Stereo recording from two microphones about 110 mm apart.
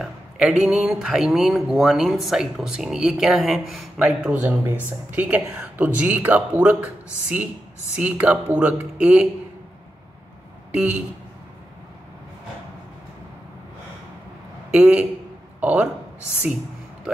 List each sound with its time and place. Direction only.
0.0 s speech: 5° right (ahead or behind)
10.7 s speech: 10° right (ahead or behind)
14.7 s a man's voice: 10° right (ahead or behind)